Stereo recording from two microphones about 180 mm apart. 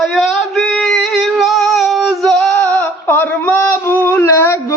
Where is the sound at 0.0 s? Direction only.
Centre (ahead or behind).